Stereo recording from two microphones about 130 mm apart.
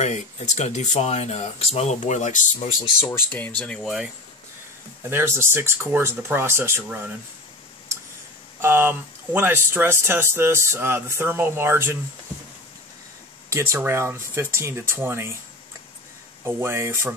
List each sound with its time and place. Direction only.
0.0 s speech: 60° left (ahead or behind)
3.3 s speech: 10° left (ahead or behind)
3.8 s speech: 5° right (ahead or behind)
5.1 s speech: 20° right (ahead or behind)
8.5 s speech: 15° right (ahead or behind)
13.5 s speech: 20° right (ahead or behind)
16.4 s speech: 20° right (ahead or behind)